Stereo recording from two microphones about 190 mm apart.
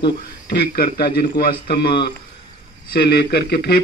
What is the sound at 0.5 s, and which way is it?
Speech, 55° left (ahead or behind).